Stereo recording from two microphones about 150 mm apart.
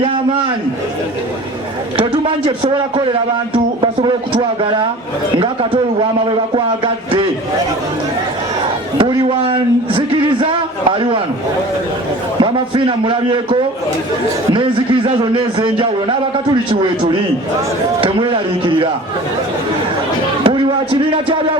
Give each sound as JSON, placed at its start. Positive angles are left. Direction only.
{"t": 2.0, "sound": "speech", "side_deg": -35}
{"t": 6.5, "sound": "speech", "side_deg": -40}
{"t": 9.0, "sound": "speech", "side_deg": -35}
{"t": 12.4, "sound": "speech", "side_deg": -35}
{"t": 18.0, "sound": "speech", "side_deg": -35}
{"t": 20.4, "sound": "music", "side_deg": -35}